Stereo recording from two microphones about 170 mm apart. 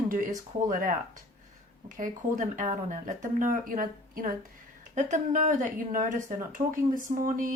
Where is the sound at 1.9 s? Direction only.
50° right (ahead or behind).